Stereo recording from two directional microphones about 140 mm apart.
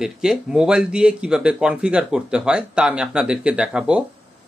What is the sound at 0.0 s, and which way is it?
Speech, 5° right (ahead or behind).